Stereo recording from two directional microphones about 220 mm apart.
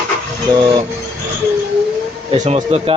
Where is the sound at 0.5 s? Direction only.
20° right (ahead or behind).